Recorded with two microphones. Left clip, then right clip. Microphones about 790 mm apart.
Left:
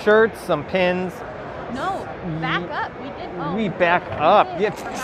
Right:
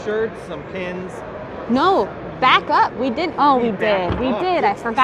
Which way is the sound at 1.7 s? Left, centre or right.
Right.